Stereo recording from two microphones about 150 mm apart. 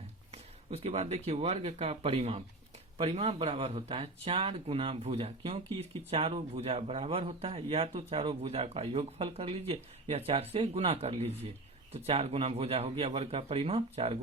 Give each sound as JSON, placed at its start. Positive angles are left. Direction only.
{"t": 0.3, "sound": "speech", "side_deg": -45}